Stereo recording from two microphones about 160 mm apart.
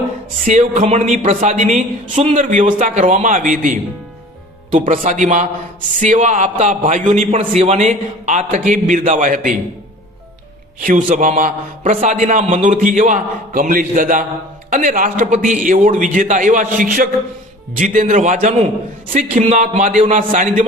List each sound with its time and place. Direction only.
0.4 s a man's voice: 50° right (ahead or behind)
4.9 s a man's voice: 55° right (ahead or behind)
10.8 s a man's voice: 55° right (ahead or behind)